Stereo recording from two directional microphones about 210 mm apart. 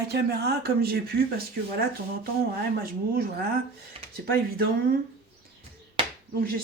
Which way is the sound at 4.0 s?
25° right (ahead or behind).